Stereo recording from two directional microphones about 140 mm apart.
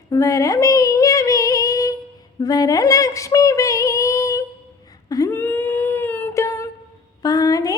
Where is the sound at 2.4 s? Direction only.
30° left (ahead or behind).